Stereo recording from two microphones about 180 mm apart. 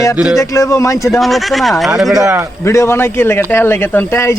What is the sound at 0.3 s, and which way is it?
Speech, 15° left (ahead or behind).